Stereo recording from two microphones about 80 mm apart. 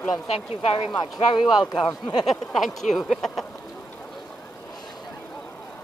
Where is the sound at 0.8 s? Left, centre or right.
Left.